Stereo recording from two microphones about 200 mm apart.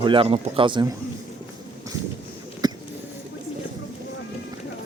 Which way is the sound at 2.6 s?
20° right (ahead or behind).